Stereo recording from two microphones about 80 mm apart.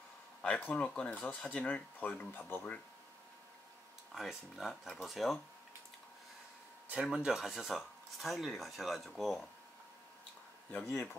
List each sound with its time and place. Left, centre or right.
0.4 s speech: centre
4.1 s speech: centre
6.9 s speech: centre
10.7 s speech: left